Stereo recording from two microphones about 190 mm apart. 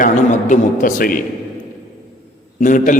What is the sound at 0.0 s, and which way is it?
A man's voice, 40° left (ahead or behind).